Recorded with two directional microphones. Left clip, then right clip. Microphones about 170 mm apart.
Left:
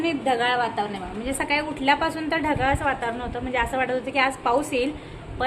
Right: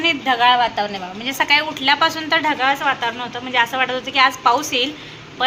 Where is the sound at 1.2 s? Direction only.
Centre (ahead or behind).